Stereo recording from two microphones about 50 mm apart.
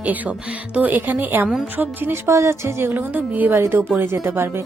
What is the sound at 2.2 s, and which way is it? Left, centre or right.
Speech, right.